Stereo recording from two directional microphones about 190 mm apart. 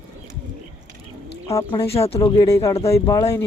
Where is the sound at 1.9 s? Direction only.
30° left (ahead or behind).